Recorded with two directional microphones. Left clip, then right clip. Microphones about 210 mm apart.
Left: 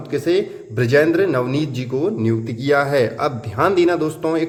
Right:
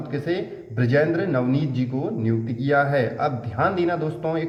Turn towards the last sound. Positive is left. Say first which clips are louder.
# left 6 dB
turn(degrees=50)  # may be behind; listen again after turning